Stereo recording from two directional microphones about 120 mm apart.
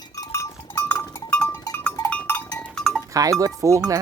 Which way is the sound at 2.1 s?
15° left (ahead or behind).